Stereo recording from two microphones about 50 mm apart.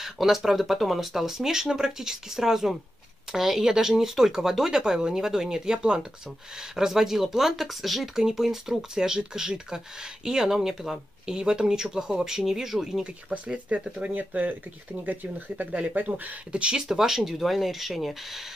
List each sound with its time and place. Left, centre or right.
0.0 s speech: centre
13.0 s speech: right
16.5 s speech: centre
16.8 s speech: centre